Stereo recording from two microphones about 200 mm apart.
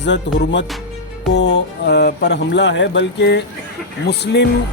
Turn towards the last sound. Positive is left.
turn(degrees=55)  # may be behind; listen again after turning